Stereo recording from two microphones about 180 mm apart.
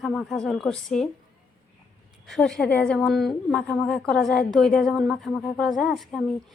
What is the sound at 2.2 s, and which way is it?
A woman's voice, centre (ahead or behind).